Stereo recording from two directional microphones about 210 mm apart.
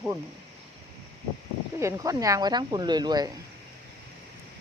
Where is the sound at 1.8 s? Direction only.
15° right (ahead or behind).